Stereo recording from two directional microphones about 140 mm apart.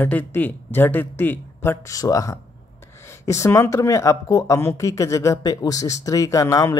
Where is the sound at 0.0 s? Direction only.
10° left (ahead or behind).